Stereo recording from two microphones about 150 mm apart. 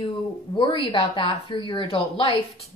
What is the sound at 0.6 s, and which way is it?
Speech, 35° left (ahead or behind).